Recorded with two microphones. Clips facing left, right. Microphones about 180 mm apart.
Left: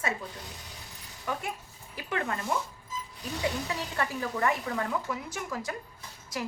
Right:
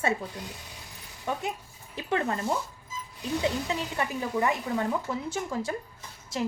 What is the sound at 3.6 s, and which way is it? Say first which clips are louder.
A woman's voice: right 2 dB; 20° right (ahead or behind).